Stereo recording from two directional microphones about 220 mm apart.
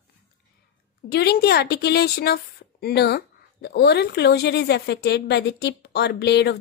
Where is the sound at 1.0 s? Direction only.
45° left (ahead or behind).